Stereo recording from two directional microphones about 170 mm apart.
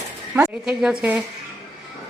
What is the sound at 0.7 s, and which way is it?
Speech, 5° right (ahead or behind).